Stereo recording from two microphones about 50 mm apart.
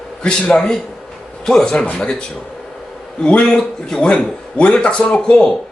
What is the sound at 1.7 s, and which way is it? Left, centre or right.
Speech, left.